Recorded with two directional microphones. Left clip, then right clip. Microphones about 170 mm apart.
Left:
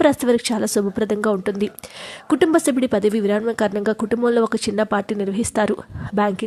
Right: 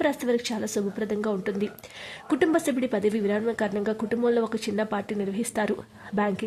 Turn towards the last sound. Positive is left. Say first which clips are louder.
# left 7 dB
turn(degrees=30)  # may be behind; listen again after turning